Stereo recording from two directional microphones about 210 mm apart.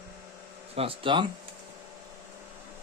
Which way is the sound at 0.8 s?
25° right (ahead or behind).